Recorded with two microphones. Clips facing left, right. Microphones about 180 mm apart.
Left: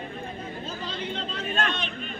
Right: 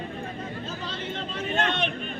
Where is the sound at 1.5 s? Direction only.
20° right (ahead or behind).